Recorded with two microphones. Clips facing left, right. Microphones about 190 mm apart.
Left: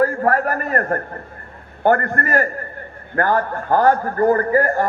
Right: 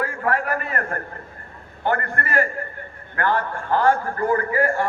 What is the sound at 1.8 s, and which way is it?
A man's voice, 50° left (ahead or behind).